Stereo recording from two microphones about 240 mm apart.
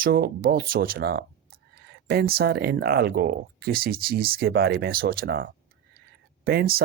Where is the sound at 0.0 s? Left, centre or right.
Right.